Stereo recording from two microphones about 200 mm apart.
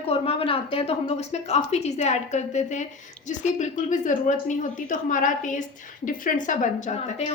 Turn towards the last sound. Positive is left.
turn(degrees=35)  # may be behind; listen again after turning